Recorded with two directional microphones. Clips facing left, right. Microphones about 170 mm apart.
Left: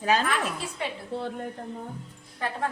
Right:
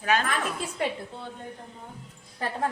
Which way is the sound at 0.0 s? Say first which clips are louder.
Left 1 dB; 30° left (ahead or behind).